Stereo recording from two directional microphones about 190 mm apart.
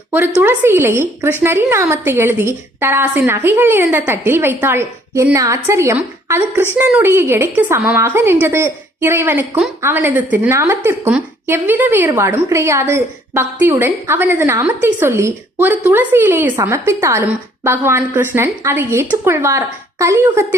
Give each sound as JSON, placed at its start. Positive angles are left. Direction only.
{"t": 0.1, "sound": "a woman's voice", "side_deg": -10}